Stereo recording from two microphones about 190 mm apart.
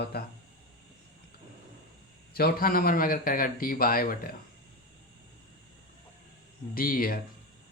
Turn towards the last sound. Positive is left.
turn(degrees=50)  # may be behind; listen again after turning